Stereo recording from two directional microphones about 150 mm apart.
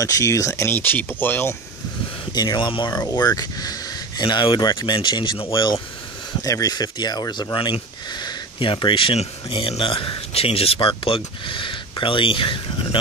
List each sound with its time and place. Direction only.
0.0 s speech: 20° left (ahead or behind)
2.3 s speech: 30° left (ahead or behind)